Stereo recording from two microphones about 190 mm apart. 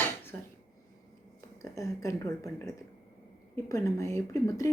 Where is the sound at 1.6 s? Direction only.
15° left (ahead or behind).